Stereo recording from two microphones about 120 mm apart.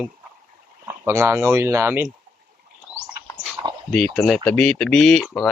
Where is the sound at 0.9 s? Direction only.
20° right (ahead or behind).